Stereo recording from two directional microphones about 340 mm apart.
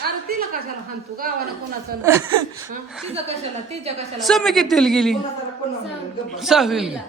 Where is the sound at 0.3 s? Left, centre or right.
Right.